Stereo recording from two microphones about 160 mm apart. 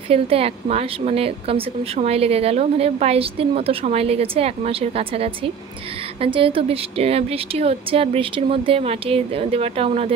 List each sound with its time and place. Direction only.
0.1 s a woman's voice: 40° right (ahead or behind)